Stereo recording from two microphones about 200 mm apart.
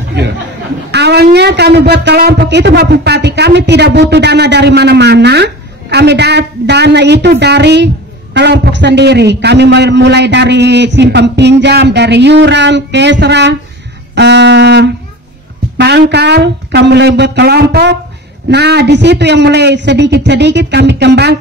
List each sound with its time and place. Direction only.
0.9 s speech: 55° right (ahead or behind)